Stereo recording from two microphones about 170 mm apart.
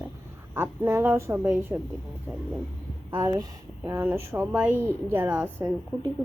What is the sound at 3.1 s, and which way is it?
A woman's voice, 20° right (ahead or behind).